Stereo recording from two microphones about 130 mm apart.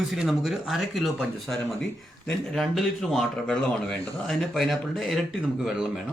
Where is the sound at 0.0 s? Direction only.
Centre (ahead or behind).